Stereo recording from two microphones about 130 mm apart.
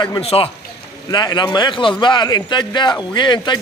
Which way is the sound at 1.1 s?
35° left (ahead or behind).